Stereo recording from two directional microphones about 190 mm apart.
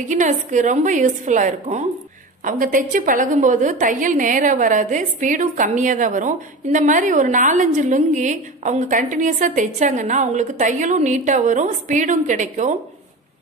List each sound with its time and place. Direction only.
0.1 s a woman's voice: 40° right (ahead or behind)